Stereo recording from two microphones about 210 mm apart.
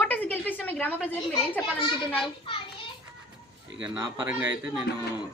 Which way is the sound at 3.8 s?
10° right (ahead or behind).